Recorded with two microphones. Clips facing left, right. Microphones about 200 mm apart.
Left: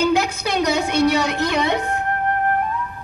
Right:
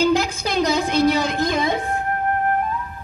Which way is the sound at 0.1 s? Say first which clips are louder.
Even; 65° left (ahead or behind).